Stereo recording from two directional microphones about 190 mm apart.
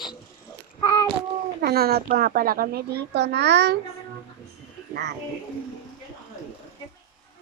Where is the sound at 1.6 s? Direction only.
55° right (ahead or behind).